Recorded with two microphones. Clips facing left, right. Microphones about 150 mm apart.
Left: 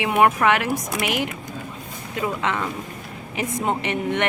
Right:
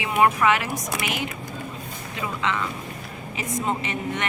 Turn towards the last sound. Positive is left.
turn(degrees=65)  # may be behind; listen again after turning